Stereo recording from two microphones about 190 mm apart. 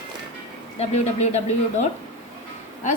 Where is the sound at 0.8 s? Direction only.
35° left (ahead or behind).